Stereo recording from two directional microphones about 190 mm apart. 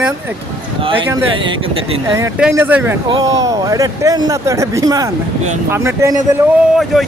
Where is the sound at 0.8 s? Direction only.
25° right (ahead or behind).